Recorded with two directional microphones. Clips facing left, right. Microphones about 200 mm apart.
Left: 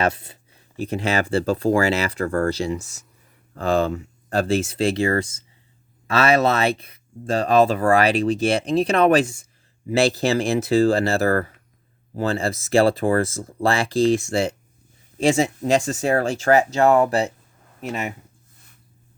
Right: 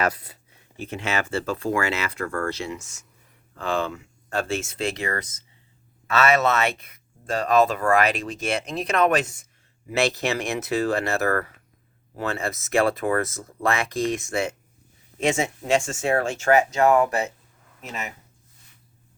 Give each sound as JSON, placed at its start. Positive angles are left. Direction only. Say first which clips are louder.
{"t": 0.0, "sound": "speech", "louder": "left 3 dB", "side_deg": 25}
{"t": 0.8, "sound": "speech", "louder": "left 5 dB", "side_deg": 35}